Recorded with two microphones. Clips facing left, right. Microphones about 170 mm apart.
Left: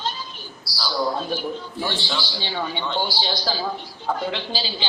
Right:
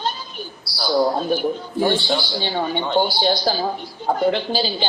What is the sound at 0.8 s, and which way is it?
Speech, 50° right (ahead or behind).